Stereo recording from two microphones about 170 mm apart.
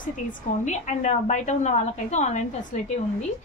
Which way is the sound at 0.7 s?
45° left (ahead or behind).